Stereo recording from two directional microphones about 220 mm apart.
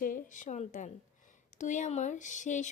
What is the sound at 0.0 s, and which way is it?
A woman's voice, 40° left (ahead or behind).